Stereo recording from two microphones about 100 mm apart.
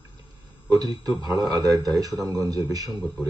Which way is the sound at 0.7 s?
40° right (ahead or behind).